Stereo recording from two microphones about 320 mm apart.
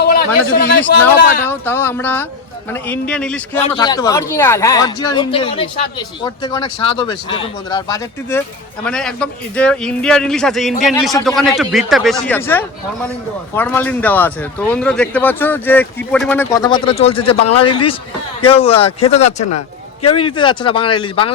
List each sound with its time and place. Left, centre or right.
0.0 s a man's voice: left
1.5 s speech: centre
17.4 s a man's voice: left
17.7 s speech: centre
19.5 s a man's voice: left
20.1 s speech: centre